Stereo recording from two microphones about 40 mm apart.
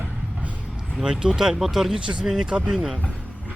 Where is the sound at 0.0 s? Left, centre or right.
Right.